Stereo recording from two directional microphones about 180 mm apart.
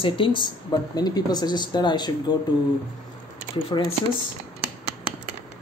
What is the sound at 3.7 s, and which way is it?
Speech, 25° left (ahead or behind).